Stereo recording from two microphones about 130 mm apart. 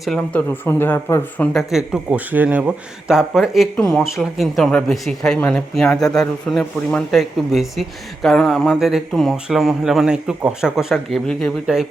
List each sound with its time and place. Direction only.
0.0 s a man's voice: 5° left (ahead or behind)
0.3 s speech: 15° left (ahead or behind)
1.5 s a man's voice: 5° right (ahead or behind)